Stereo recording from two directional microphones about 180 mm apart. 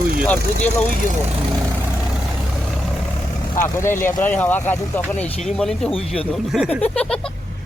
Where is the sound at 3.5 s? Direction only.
15° left (ahead or behind).